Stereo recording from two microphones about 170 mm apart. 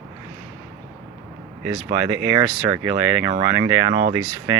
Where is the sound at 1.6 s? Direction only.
10° right (ahead or behind).